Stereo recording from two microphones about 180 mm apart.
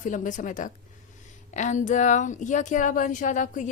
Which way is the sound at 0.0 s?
45° left (ahead or behind).